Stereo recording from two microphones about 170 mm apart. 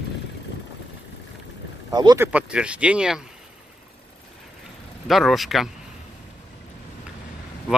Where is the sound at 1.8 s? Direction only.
25° right (ahead or behind).